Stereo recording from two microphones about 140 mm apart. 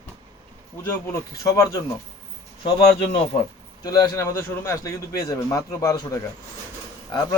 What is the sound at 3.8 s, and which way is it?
A man's voice, 25° left (ahead or behind).